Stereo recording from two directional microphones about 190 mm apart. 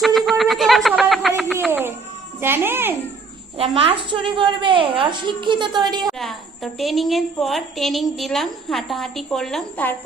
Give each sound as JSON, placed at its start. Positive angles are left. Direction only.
{"t": 0.0, "sound": "a sound", "side_deg": 0}
{"t": 2.4, "sound": "a child's voice", "side_deg": -10}
{"t": 3.6, "sound": "a woman's voice", "side_deg": -30}
{"t": 6.1, "sound": "a woman's voice", "side_deg": 0}